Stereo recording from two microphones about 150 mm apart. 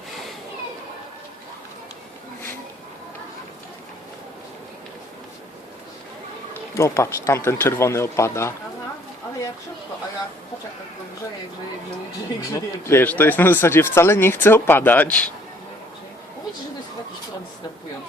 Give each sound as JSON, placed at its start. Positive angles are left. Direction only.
{"t": 6.5, "sound": "speech", "side_deg": 20}
{"t": 12.5, "sound": "speech", "side_deg": 15}